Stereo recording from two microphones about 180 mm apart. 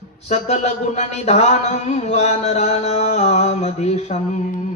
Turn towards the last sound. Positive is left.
turn(degrees=40)  # may be behind; listen again after turning